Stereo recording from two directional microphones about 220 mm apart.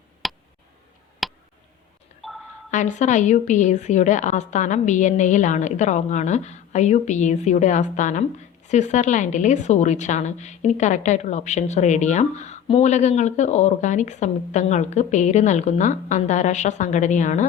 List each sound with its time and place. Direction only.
0.2 s tick: centre (ahead or behind)
1.2 s a sound: centre (ahead or behind)
2.6 s a woman's voice: 35° left (ahead or behind)